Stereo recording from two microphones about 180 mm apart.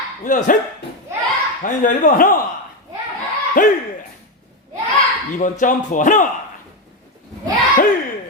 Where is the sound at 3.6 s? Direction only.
45° left (ahead or behind).